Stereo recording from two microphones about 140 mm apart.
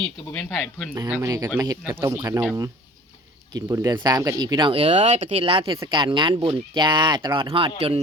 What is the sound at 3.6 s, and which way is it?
Speech, 25° right (ahead or behind).